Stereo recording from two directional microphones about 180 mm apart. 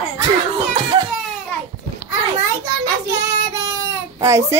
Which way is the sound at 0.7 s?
25° right (ahead or behind).